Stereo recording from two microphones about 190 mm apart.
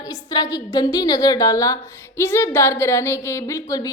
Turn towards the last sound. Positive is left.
turn(degrees=15)  # may be behind; listen again after turning